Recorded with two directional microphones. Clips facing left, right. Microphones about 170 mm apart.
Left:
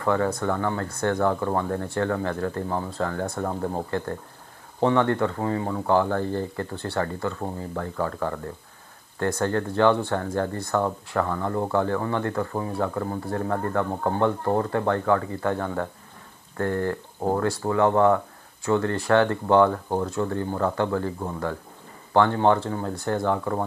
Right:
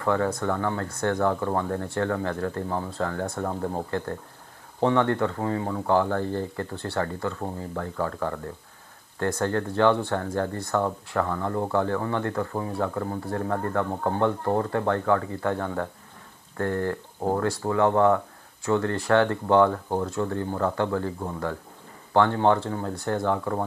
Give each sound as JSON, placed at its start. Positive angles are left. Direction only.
{"t": 0.0, "sound": "speech", "side_deg": 20}